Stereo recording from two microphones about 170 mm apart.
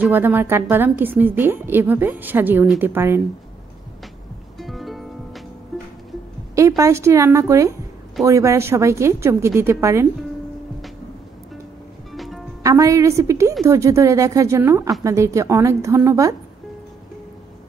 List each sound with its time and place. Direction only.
0.0 s a woman's voice: 10° right (ahead or behind)
4.6 s music: centre (ahead or behind)
6.8 s a woman's voice: 15° right (ahead or behind)
12.1 s music: centre (ahead or behind)
12.6 s a woman's voice: 20° right (ahead or behind)